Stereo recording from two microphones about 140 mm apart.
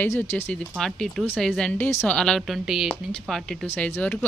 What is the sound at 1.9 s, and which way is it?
Speech, 15° left (ahead or behind).